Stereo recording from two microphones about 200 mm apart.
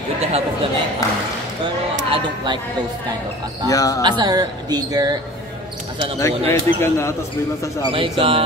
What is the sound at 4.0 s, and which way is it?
Speech, 20° right (ahead or behind).